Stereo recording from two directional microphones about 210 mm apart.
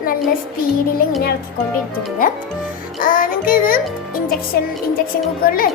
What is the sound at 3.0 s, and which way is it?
Music, 40° left (ahead or behind).